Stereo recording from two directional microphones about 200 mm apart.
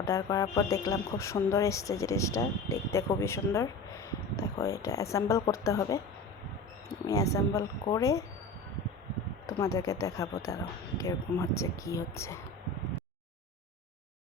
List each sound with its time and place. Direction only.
0.0 s speech: 15° left (ahead or behind)
7.1 s speech: 15° left (ahead or behind)
9.5 s speech: 15° left (ahead or behind)